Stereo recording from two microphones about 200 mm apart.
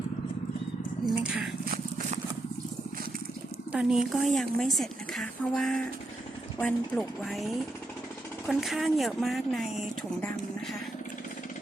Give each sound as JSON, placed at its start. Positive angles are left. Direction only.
{"t": 1.0, "sound": "speech", "side_deg": -5}
{"t": 1.6, "sound": "horse", "side_deg": -45}
{"t": 3.7, "sound": "speech", "side_deg": -5}